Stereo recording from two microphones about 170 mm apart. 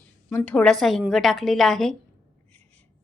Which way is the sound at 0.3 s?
5° left (ahead or behind).